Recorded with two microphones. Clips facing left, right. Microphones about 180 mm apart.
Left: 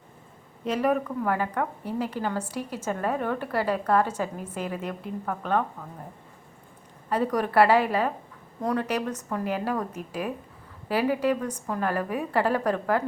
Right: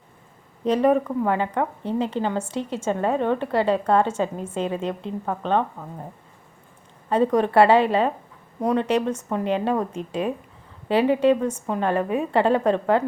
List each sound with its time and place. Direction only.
0.6 s a woman's voice: 30° right (ahead or behind)
7.1 s a woman's voice: 25° right (ahead or behind)